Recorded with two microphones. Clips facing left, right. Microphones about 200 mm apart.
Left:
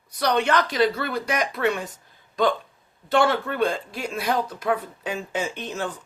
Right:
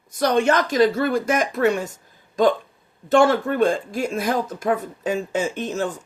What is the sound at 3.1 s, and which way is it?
Speech, 45° right (ahead or behind).